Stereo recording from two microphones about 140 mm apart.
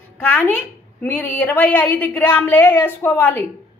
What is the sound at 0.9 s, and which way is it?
A woman's voice, 10° left (ahead or behind).